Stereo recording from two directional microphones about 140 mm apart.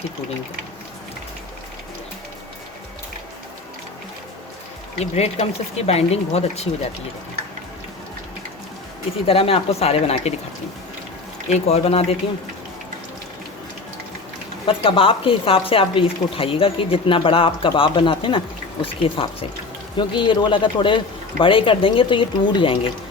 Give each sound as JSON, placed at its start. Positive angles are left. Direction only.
{"t": 4.9, "sound": "speech", "side_deg": 50}
{"t": 9.2, "sound": "speech", "side_deg": 45}
{"t": 11.4, "sound": "speech", "side_deg": 50}
{"t": 14.7, "sound": "speech", "side_deg": 40}